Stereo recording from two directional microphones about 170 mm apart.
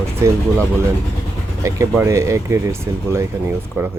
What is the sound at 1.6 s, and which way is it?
Speech, 15° right (ahead or behind).